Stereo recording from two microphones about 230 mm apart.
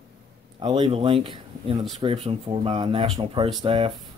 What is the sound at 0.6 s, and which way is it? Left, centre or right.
Speech, right.